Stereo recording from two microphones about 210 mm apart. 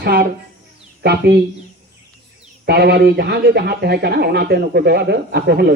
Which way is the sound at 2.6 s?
50° right (ahead or behind).